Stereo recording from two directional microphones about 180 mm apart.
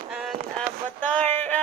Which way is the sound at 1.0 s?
10° left (ahead or behind).